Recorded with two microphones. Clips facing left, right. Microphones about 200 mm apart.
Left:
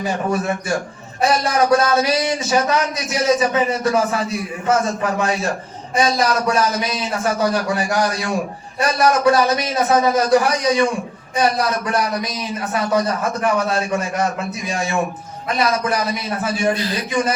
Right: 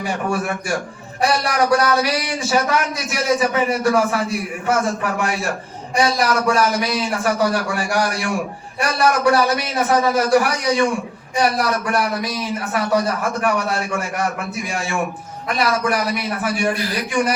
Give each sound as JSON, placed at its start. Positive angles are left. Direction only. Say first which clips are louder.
{"t": 0.0, "sound": "speech", "louder": "left 2 dB", "side_deg": 20}